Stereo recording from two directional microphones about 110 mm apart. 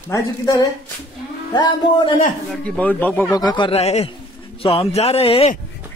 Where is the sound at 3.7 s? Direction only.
75° left (ahead or behind).